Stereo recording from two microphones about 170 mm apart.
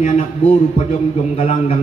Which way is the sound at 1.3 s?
40° left (ahead or behind).